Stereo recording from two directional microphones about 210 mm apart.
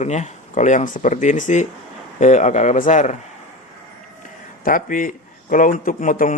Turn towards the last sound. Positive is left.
turn(degrees=35)  # may be behind; listen again after turning